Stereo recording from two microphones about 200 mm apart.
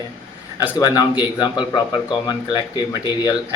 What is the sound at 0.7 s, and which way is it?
Speech, 20° left (ahead or behind).